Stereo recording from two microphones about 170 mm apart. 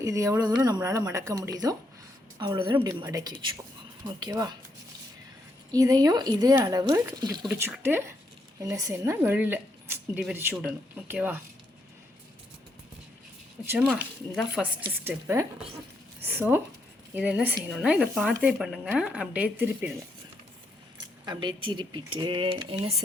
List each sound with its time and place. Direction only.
0.0 s speech: 20° right (ahead or behind)
5.7 s speech: 20° right (ahead or behind)
8.5 s speech: 20° right (ahead or behind)
13.7 s speech: 10° right (ahead or behind)
15.0 s speech: 15° right (ahead or behind)
21.2 s speech: 25° right (ahead or behind)